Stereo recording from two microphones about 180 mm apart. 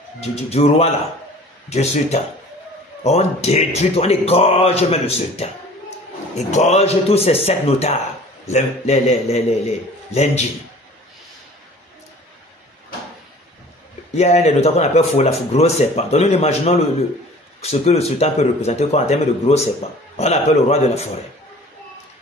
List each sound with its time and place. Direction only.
0.2 s speech: 35° left (ahead or behind)
14.1 s speech: 35° left (ahead or behind)